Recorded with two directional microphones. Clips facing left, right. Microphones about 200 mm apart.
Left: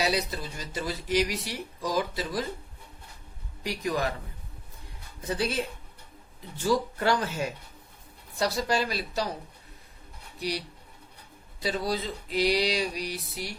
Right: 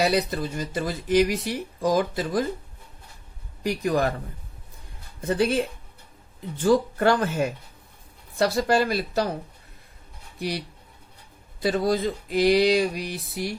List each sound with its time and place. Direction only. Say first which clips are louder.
0.0 s speech: right 6 dB; 55° right (ahead or behind)
3.6 s speech: right 6 dB; 50° right (ahead or behind)
5.3 s speech: right 7 dB; 55° right (ahead or behind)
11.6 s speech: right 7 dB; 50° right (ahead or behind)